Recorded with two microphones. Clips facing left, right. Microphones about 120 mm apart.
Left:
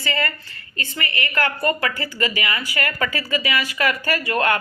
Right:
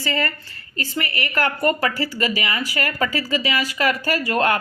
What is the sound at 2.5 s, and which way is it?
Speech, 20° right (ahead or behind).